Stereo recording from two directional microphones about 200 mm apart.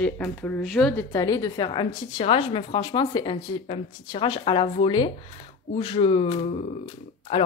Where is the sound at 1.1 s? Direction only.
15° left (ahead or behind).